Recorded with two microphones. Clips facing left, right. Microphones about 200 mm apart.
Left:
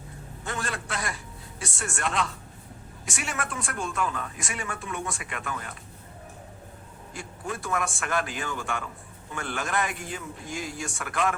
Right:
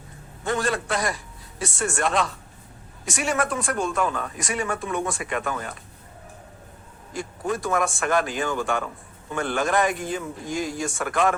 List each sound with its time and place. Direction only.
0.5 s a man's voice: 40° right (ahead or behind)
7.2 s speech: 40° right (ahead or behind)